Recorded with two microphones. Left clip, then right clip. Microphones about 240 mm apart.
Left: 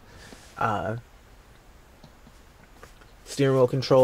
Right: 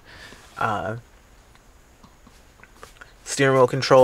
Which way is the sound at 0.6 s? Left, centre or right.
Centre.